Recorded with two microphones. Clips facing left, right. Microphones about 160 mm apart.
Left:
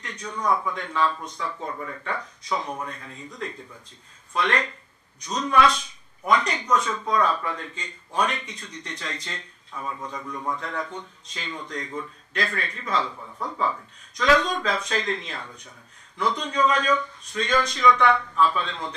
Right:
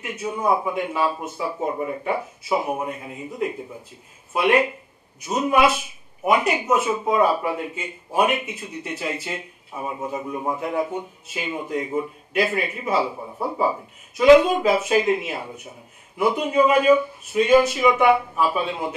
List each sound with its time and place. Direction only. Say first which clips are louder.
0.0 s speech: right 5 dB; 10° right (ahead or behind)
1.7 s speech: right 7 dB; 20° right (ahead or behind)
13.1 s speech: right 7 dB; 30° right (ahead or behind)
14.1 s speech: right 9 dB; 10° right (ahead or behind)